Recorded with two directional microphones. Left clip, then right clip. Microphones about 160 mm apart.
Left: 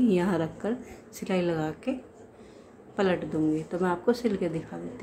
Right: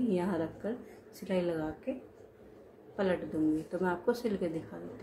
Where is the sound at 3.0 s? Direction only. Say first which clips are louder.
Left 5 dB; 30° left (ahead or behind).